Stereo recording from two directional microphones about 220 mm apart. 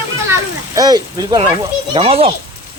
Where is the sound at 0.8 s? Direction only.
20° right (ahead or behind).